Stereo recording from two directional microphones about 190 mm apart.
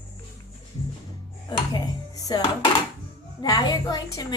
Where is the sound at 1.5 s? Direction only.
25° left (ahead or behind).